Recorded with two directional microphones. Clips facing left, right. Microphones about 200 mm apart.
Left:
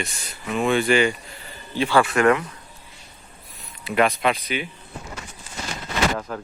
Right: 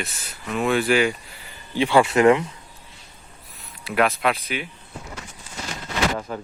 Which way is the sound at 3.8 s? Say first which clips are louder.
Left 1 dB; centre (ahead or behind).